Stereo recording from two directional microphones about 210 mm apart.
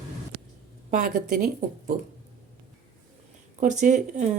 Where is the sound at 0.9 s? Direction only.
40° right (ahead or behind).